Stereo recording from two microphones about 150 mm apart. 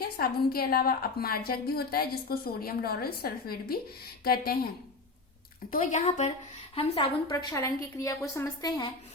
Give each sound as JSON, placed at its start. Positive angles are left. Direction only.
{"t": 0.0, "sound": "a woman's voice", "side_deg": 90}
{"t": 5.7, "sound": "speech", "side_deg": 50}
{"t": 6.7, "sound": "a woman's voice", "side_deg": 40}
{"t": 7.3, "sound": "a woman's voice", "side_deg": 20}